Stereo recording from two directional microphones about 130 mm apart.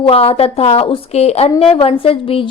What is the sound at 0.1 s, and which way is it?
A woman's voice, 50° left (ahead or behind).